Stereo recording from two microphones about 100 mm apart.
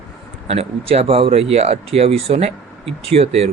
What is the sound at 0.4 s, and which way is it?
Speech, 85° right.